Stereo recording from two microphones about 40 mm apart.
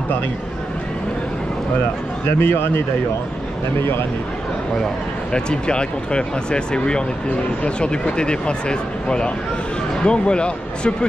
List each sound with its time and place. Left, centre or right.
2.2 s a man's voice: left
5.3 s speech: left